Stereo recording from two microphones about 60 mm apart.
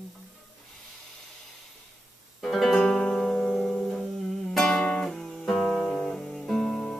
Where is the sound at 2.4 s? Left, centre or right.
Centre.